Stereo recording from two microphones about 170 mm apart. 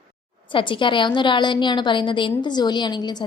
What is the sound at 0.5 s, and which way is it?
A woman's voice, 30° left (ahead or behind).